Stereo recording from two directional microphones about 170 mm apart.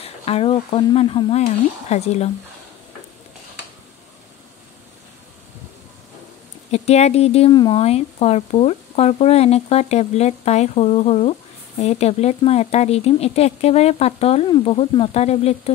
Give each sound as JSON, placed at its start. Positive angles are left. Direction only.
{"t": 0.0, "sound": "speech", "side_deg": 35}
{"t": 6.7, "sound": "speech", "side_deg": 40}